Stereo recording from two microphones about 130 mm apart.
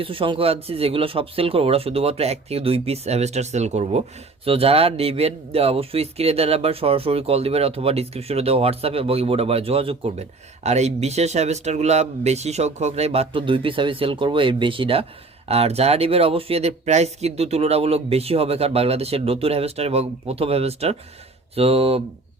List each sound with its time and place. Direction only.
0.0 s speech: 45° right (ahead or behind); by 4.0 s 60° right (ahead or behind)
4.4 s speech: 50° right (ahead or behind)